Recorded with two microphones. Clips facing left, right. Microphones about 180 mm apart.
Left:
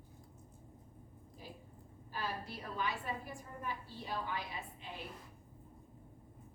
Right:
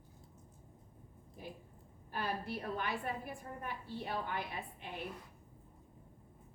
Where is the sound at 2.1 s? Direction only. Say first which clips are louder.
Right 3 dB; 55° right (ahead or behind).